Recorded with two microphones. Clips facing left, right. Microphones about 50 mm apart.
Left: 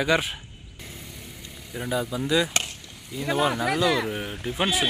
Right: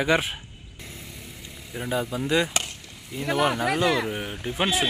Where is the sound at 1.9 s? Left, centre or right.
Centre.